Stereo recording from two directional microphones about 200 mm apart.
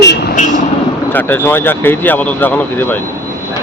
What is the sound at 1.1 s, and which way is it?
Speech, 10° left (ahead or behind).